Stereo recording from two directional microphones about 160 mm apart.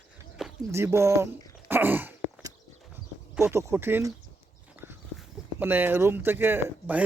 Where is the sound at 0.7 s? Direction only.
15° right (ahead or behind).